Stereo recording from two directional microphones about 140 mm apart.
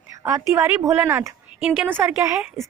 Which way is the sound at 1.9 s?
15° right (ahead or behind).